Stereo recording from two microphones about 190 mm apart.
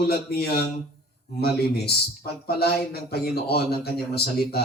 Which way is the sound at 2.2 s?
55° left (ahead or behind).